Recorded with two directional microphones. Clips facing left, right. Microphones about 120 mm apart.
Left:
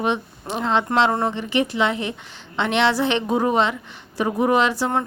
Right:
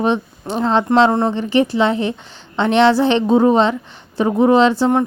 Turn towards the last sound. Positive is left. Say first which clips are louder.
# right 7 dB
turn(degrees=-20)  # may be behind; listen again after turning